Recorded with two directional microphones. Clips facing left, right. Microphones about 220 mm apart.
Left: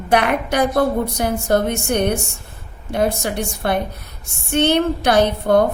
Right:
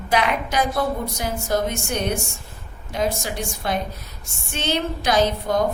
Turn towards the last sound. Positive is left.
turn(degrees=60)  # may be behind; listen again after turning